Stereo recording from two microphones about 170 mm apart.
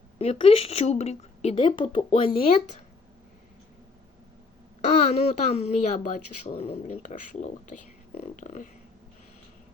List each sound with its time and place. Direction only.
0.2 s a woman's voice: 35° left (ahead or behind)
4.8 s speech: 45° left (ahead or behind)